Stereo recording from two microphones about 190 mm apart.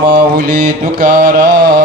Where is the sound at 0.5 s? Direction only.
45° right (ahead or behind).